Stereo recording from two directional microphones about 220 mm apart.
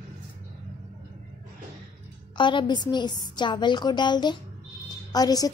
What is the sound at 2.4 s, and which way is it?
A woman's voice, 20° left (ahead or behind).